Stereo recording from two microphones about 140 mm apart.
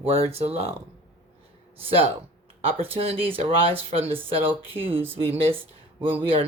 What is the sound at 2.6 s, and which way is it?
Speech, 40° right (ahead or behind).